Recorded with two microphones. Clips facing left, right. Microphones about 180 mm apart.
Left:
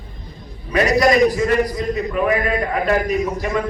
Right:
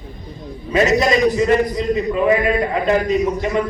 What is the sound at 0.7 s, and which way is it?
A man's voice, 25° right (ahead or behind).